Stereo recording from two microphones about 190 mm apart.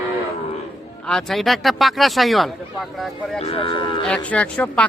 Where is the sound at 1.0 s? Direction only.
Centre (ahead or behind).